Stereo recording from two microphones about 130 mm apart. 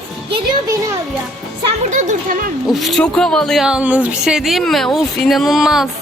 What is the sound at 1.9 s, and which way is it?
Speech, 65° right (ahead or behind).